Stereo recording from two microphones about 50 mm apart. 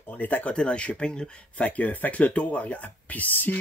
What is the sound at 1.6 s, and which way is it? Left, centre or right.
Speech, left.